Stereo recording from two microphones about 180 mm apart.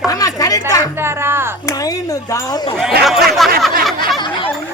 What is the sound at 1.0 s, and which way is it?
Speech, 15° right (ahead or behind).